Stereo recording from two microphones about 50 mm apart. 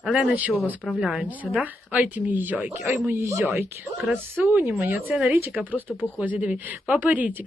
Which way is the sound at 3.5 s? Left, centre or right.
Right.